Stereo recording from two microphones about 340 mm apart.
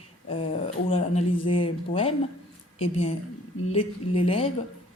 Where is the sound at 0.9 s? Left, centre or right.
Centre.